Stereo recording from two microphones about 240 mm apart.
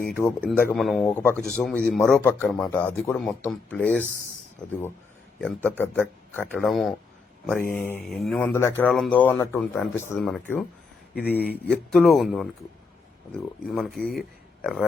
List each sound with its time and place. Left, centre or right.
0.1 s speech: centre
5.4 s speech: centre
11.1 s speech: left
11.6 s speech: centre